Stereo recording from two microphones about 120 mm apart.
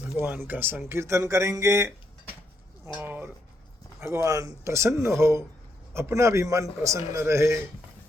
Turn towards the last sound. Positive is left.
turn(degrees=-25)  # may be behind; listen again after turning